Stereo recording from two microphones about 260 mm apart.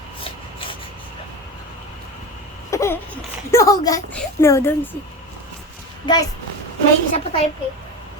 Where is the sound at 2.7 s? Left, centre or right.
Centre.